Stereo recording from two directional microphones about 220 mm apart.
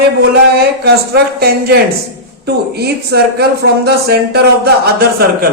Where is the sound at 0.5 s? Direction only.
45° right (ahead or behind).